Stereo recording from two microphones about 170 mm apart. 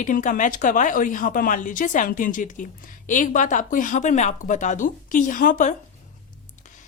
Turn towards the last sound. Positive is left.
turn(degrees=50)  # may be behind; listen again after turning